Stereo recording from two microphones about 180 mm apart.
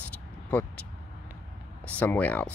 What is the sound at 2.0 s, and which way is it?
Speech, 10° left (ahead or behind).